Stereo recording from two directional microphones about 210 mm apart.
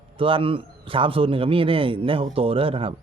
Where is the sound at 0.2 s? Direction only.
25° right (ahead or behind).